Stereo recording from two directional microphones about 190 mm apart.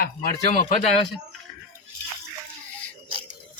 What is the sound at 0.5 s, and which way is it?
Speech, 45° left (ahead or behind).